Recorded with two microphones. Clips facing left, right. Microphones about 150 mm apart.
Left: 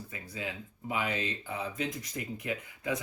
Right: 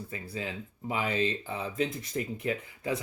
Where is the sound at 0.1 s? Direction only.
30° right (ahead or behind).